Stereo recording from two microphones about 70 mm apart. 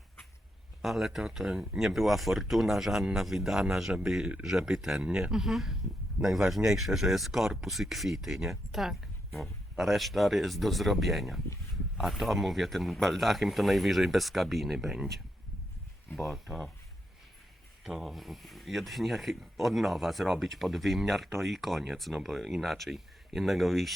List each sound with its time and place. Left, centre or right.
0.8 s speech: centre
17.8 s speech: centre